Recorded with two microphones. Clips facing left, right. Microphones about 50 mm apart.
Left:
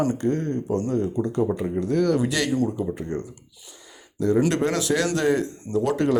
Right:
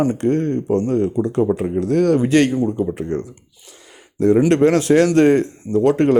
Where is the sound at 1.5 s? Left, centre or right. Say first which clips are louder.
Right 6 dB; right.